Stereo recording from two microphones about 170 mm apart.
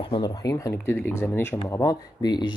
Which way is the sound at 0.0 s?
30° left (ahead or behind).